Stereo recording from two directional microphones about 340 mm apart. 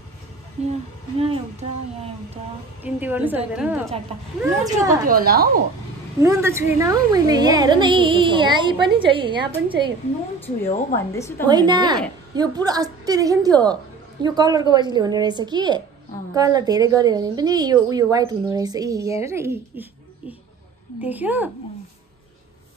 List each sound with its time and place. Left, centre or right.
1.2 s a woman's voice: centre
2.8 s a woman's voice: centre
5.0 s a woman's voice: right
6.1 s a woman's voice: centre
11.0 s a woman's voice: centre
11.4 s a woman's voice: centre
21.0 s a woman's voice: centre